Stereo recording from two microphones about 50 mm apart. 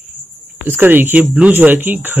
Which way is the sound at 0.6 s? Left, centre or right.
Right.